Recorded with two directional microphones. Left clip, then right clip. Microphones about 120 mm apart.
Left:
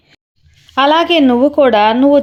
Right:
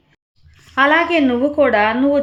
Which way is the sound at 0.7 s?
30° left (ahead or behind).